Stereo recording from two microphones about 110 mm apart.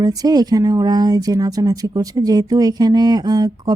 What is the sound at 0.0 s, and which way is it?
Speech, 35° right (ahead or behind).